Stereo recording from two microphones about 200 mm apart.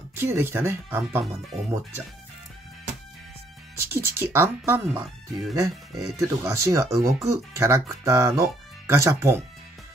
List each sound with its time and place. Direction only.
0.1 s speech: 10° right (ahead or behind)
3.7 s speech: 15° right (ahead or behind)